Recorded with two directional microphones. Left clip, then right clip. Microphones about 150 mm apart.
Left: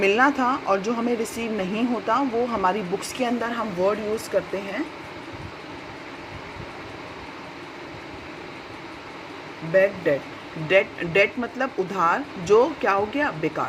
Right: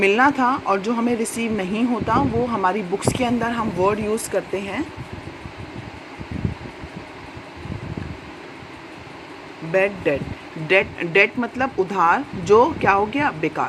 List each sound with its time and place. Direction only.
0.0 s speech: 30° right (ahead or behind)
4.3 s speech: 55° right (ahead or behind)
9.7 s speech: 50° right (ahead or behind)
10.7 s speech: 40° right (ahead or behind)